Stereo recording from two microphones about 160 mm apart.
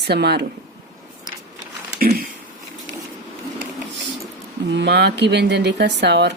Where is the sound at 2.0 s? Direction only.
65° right (ahead or behind).